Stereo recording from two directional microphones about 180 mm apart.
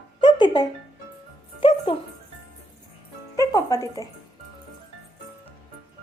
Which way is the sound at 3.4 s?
20° left (ahead or behind).